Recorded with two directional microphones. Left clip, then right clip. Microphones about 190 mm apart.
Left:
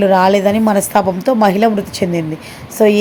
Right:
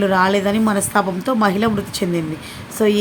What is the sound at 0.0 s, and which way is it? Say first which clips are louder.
A woman's voice: left 5 dB; 15° left (ahead or behind).